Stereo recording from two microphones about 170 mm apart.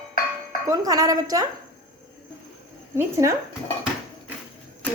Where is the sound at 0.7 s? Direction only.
20° right (ahead or behind).